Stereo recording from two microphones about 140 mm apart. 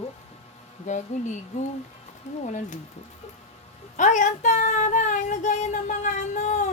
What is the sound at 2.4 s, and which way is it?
Child singing, 60° left (ahead or behind).